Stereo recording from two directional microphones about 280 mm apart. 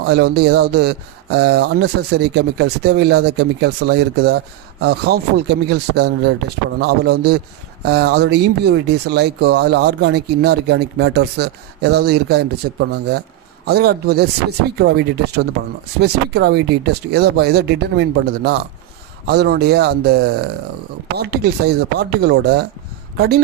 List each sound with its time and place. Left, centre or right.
0.0 s speech: right